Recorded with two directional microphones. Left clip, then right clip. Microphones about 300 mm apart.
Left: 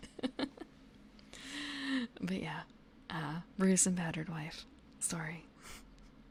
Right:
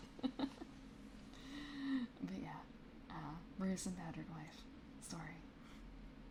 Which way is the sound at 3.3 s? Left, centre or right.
Left.